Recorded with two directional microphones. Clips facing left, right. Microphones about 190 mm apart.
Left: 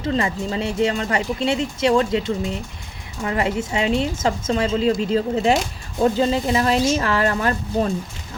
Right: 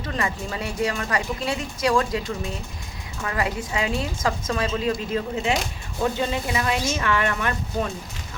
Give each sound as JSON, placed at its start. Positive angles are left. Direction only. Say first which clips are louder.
{"t": 0.0, "sound": "a woman's voice", "louder": "left 6 dB", "side_deg": 25}